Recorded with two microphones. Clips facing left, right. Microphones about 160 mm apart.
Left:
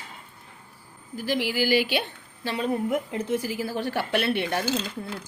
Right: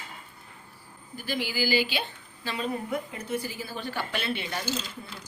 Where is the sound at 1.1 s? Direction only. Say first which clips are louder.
Left 5 dB; 85° left.